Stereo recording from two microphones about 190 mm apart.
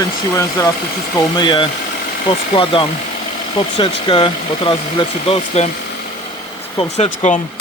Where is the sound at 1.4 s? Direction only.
25° left (ahead or behind).